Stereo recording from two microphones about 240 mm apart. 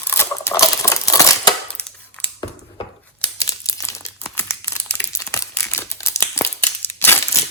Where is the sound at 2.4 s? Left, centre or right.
Left.